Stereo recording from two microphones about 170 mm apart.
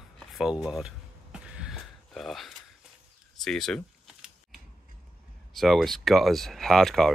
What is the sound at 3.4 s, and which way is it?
Camera, centre (ahead or behind).